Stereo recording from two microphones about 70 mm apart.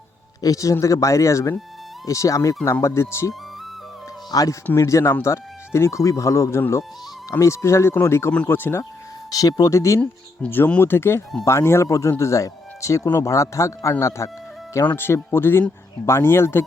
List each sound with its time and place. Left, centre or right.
0.4 s speech: left
2.8 s speech: left
4.3 s speech: left
4.8 s speech: left
9.3 s speech: left
10.4 s speech: centre
10.8 s speech: left
14.9 s speech: left